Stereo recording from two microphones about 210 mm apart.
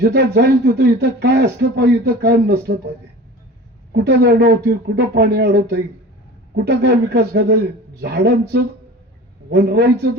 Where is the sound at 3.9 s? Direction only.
50° right (ahead or behind).